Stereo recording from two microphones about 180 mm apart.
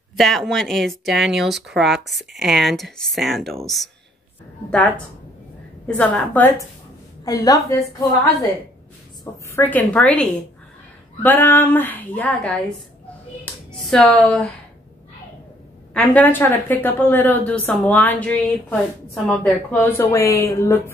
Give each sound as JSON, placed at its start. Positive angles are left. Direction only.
{"t": 0.2, "sound": "a woman's voice", "side_deg": 0}
{"t": 7.2, "sound": "a woman's voice", "side_deg": 20}
{"t": 11.2, "sound": "a woman's voice", "side_deg": 10}
{"t": 13.5, "sound": "clapping", "side_deg": 5}
{"t": 13.8, "sound": "speech", "side_deg": 5}
{"t": 15.9, "sound": "a woman's voice", "side_deg": 5}